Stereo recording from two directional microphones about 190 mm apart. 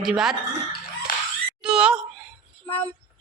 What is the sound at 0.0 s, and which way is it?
Speech, centre (ahead or behind).